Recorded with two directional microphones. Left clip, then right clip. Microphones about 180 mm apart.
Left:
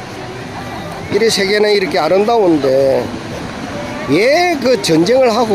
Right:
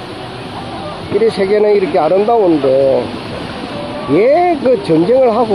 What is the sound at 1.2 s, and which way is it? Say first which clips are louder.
Speech: right 1 dB; 20° left (ahead or behind).